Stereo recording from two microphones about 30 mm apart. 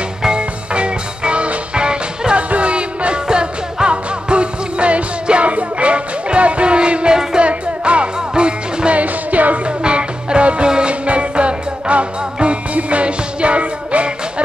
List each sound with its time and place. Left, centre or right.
0.4 s music: right
2.3 s music: right
8.9 s music: right
9.8 s music: right